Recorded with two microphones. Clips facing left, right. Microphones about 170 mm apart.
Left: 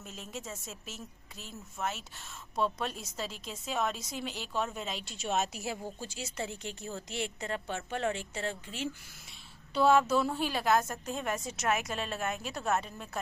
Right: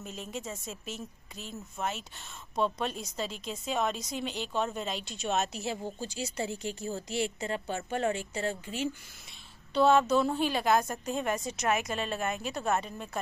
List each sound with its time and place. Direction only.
0.0 s a woman's voice: centre (ahead or behind)
6.9 s a woman's voice: 35° right (ahead or behind)
7.2 s a woman's voice: 5° right (ahead or behind)